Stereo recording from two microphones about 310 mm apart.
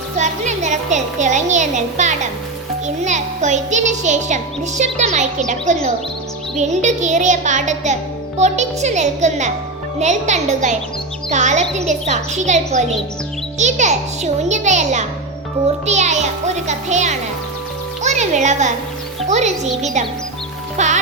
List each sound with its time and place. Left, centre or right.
0.2 s a child's voice: right